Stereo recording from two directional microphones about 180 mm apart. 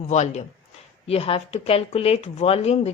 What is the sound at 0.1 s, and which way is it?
Speech, 40° left (ahead or behind).